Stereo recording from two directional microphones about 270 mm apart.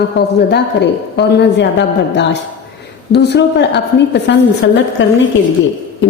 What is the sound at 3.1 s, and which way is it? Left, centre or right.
A man's voice, left.